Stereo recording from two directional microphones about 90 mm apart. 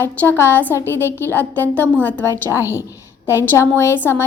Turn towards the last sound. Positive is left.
turn(degrees=30)  # may be behind; listen again after turning